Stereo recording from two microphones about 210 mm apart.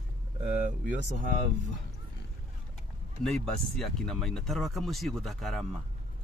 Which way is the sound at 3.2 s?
Centre (ahead or behind).